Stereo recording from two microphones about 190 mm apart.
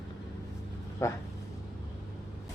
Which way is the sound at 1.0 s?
15° left (ahead or behind).